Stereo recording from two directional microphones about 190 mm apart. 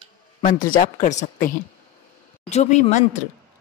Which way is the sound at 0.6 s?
45° left (ahead or behind).